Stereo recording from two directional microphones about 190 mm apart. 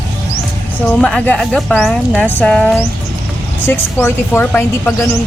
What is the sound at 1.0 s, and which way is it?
A woman's voice, 5° left (ahead or behind).